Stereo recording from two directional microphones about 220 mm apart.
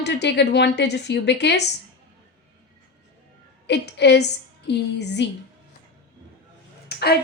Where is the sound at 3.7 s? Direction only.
50° left (ahead or behind).